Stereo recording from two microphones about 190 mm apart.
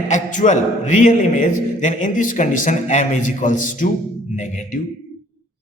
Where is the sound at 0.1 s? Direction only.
40° left (ahead or behind).